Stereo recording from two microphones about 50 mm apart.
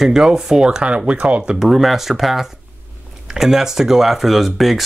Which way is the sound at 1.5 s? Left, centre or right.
Centre.